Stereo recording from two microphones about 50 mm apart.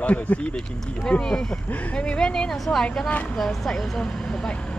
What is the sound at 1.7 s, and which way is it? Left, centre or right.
Speech, left.